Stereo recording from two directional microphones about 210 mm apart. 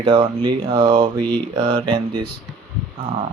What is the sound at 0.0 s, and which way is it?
Speech, 25° right (ahead or behind).